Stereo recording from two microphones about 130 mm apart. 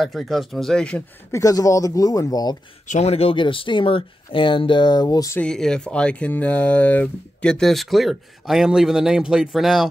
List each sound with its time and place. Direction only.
0.0 s speech: centre (ahead or behind)
1.3 s speech: 25° left (ahead or behind)
2.9 s speech: 55° left (ahead or behind); by 5.4 s 30° left (ahead or behind)
5.4 s speech: 5° left (ahead or behind)